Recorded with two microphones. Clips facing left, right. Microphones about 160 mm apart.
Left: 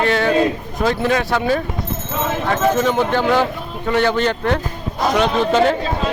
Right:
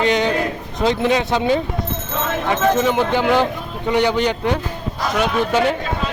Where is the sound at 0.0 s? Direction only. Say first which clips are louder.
Left 2 dB; 20° right (ahead or behind).